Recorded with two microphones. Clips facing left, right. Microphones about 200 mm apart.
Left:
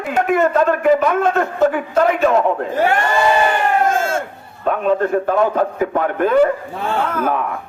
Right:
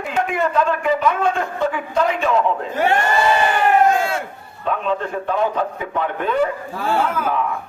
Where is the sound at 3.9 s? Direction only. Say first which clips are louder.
Even; 45° left (ahead or behind).